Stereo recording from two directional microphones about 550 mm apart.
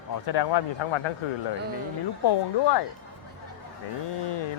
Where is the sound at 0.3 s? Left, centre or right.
Left.